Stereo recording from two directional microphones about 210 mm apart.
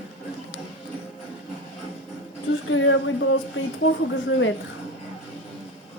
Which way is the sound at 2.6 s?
65° left (ahead or behind).